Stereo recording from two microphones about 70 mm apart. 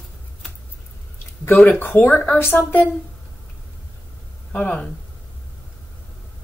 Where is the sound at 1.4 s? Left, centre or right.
Left.